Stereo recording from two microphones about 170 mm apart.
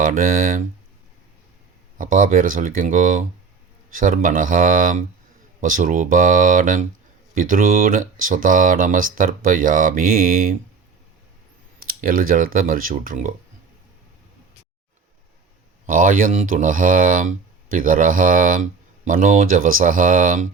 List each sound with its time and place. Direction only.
0.0 s speech: 55° right (ahead or behind)
2.0 s speech: 50° right (ahead or behind)
11.8 s speech: 55° right (ahead or behind)
15.9 s speech: 50° right (ahead or behind)